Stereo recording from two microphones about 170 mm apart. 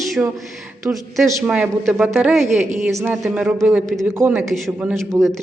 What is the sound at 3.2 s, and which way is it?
A woman's voice, 5° right (ahead or behind).